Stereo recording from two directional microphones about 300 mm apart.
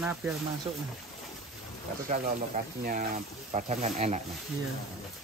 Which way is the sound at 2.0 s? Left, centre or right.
Right.